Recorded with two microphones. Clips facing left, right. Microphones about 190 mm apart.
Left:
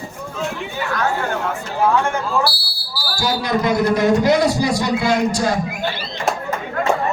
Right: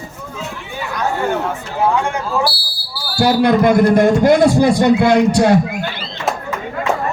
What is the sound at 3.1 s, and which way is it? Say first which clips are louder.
A man's voice: right 8 dB; 60° right (ahead or behind).